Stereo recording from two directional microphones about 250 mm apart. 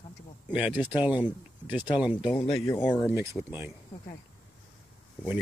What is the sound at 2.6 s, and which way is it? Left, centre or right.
Speech, centre.